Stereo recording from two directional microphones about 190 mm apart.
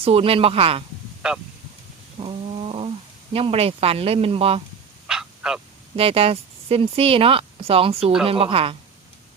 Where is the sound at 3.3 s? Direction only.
30° right (ahead or behind).